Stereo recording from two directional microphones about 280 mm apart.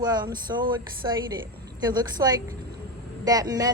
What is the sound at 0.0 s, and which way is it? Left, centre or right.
A woman's voice, centre.